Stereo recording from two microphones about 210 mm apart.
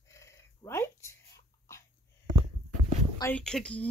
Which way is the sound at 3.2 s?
5° left (ahead or behind).